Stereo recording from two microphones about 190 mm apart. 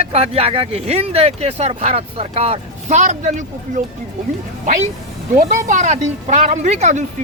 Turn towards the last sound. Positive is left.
turn(degrees=-35)  # may be behind; listen again after turning